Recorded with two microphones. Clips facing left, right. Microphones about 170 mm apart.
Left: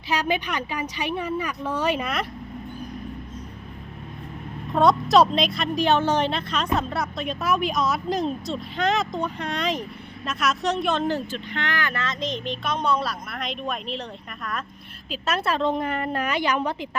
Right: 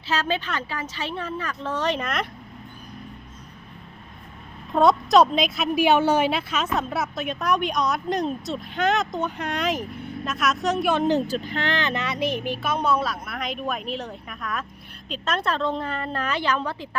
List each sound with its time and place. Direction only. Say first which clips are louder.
0.1 s speech: left 1 dB; 15° left (ahead or behind)
4.7 s speech: right 1 dB; centre (ahead or behind)
11.3 s speech: right 4 dB; 35° right (ahead or behind); by 17.0 s 15° left (ahead or behind)